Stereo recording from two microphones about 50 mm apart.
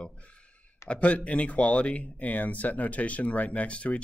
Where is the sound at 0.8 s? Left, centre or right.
Left.